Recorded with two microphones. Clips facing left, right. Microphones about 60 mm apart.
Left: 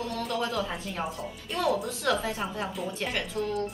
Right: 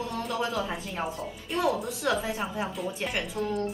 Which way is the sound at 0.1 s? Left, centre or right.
Centre.